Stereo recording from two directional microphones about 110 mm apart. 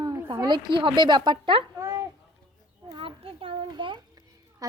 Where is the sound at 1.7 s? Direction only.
25° right (ahead or behind).